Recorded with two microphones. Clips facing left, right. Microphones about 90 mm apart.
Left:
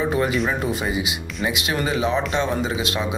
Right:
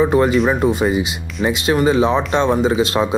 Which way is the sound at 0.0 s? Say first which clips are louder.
Right 7 dB; 30° right (ahead or behind).